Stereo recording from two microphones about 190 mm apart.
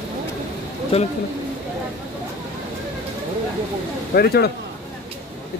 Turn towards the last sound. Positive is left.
turn(degrees=55)  # may be behind; listen again after turning